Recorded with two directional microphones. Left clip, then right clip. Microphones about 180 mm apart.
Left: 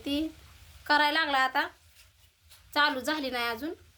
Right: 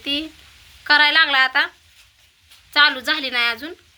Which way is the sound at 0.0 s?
15° left (ahead or behind).